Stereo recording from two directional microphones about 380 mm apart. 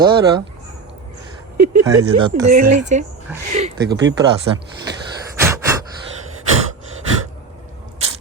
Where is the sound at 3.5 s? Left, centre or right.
Centre.